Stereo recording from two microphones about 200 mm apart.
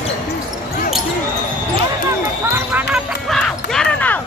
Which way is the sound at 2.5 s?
10° right (ahead or behind).